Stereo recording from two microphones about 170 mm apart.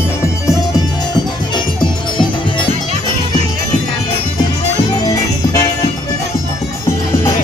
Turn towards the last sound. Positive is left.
turn(degrees=20)  # may be behind; listen again after turning